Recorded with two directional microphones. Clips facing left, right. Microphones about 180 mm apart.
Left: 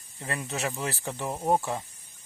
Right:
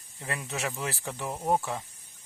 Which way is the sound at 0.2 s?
Centre (ahead or behind).